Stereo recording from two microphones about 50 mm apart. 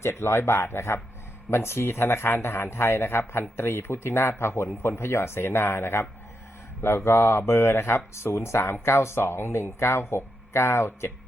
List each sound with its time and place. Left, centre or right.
0.0 s speech: left
7.4 s speech: left